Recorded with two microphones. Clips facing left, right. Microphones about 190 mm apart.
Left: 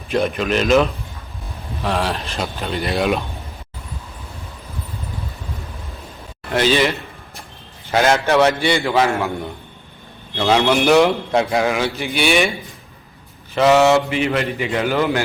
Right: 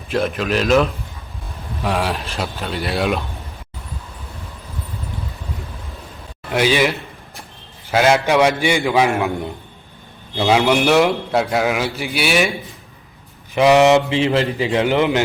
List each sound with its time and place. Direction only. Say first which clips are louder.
0.1 s a man's voice: left 1 dB; centre (ahead or behind)
1.8 s a man's voice: even; 10° right (ahead or behind)
6.5 s a man's voice: even; 10° right (ahead or behind)
10.3 s a man's voice: right 1 dB; 5° right (ahead or behind)
13.5 s a man's voice: right 1 dB; 15° right (ahead or behind)
14.1 s a man's voice: right 2 dB; 25° right (ahead or behind)